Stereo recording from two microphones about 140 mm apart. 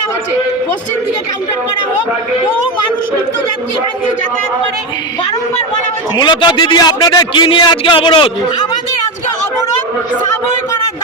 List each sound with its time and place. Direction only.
6.1 s a man's voice: 35° left (ahead or behind)